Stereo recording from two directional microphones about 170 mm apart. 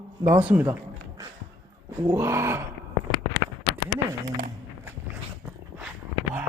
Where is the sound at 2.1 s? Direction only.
15° right (ahead or behind).